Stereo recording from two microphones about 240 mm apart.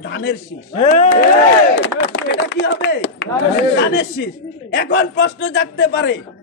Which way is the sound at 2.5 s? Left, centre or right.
Left.